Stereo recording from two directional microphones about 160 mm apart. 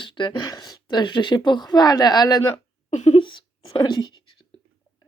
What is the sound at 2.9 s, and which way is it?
Speech, 45° left (ahead or behind).